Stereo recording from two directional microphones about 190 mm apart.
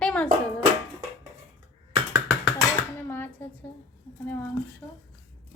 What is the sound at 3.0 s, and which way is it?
Speech, 10° left (ahead or behind).